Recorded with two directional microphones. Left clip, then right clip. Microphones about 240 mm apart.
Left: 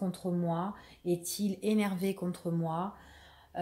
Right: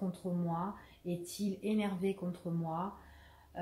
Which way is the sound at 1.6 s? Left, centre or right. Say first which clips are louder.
Left 4 dB; left.